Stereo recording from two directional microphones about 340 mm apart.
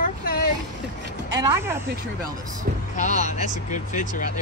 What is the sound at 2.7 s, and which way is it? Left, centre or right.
Speech, right.